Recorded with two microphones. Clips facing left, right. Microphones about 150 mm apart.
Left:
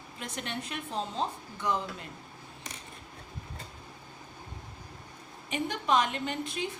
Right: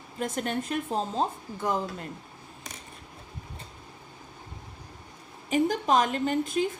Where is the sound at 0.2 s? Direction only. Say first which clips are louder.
Right 8 dB; 45° right (ahead or behind).